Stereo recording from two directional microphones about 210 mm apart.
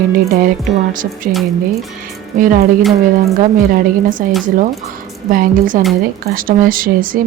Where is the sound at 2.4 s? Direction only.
40° right (ahead or behind).